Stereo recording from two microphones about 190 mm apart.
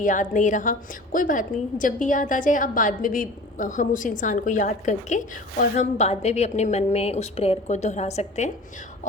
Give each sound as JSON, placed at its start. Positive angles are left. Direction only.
{"t": 0.0, "sound": "a woman's voice", "side_deg": 40}